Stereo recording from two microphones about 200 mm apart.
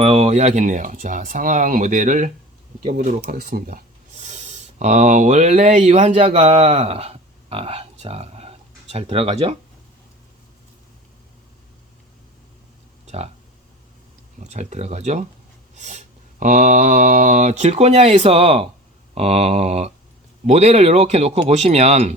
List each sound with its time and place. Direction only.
0.0 s speech: 30° right (ahead or behind)
13.1 s speech: 30° right (ahead or behind)
14.4 s speech: 35° right (ahead or behind)